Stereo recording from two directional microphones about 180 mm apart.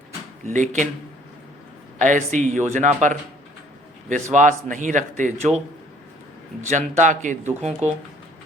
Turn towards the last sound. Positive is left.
turn(degrees=-40)  # may be behind; listen again after turning